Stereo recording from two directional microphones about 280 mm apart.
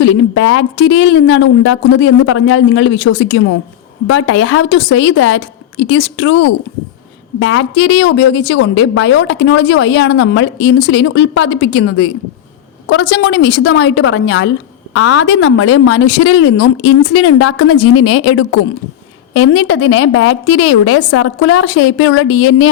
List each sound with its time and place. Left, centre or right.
0.0 s a woman's voice: left